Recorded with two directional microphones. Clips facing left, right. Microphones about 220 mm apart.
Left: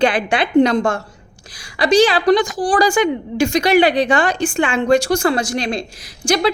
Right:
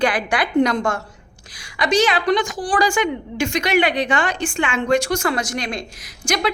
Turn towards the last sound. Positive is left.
turn(degrees=30)  # may be behind; listen again after turning